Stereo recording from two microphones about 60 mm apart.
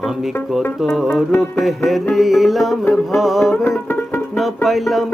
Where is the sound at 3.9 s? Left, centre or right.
Left.